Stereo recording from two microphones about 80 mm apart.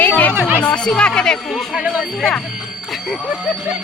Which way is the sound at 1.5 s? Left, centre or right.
Centre.